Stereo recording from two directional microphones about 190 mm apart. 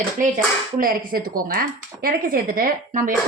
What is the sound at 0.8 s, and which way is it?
A woman's voice, 50° right (ahead or behind).